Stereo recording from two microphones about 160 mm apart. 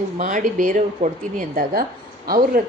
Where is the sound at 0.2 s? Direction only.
55° right (ahead or behind).